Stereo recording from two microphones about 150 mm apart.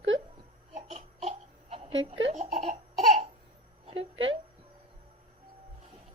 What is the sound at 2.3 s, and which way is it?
Laughter, 50° right (ahead or behind).